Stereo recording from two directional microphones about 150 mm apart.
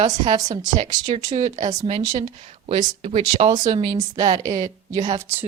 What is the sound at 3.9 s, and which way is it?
A woman's voice, 25° right (ahead or behind).